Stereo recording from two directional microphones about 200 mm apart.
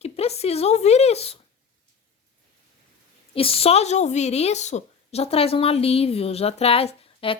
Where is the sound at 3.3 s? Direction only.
30° left (ahead or behind).